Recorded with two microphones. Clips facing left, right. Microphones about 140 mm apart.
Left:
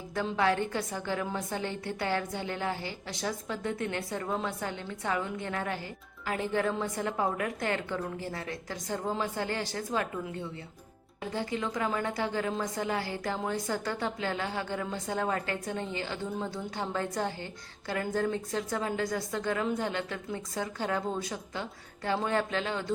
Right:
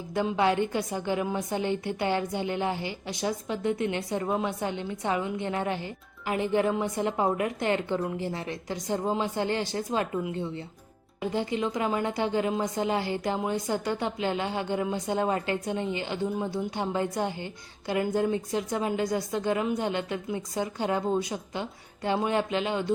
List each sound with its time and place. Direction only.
0.1 s a woman's voice: 20° right (ahead or behind)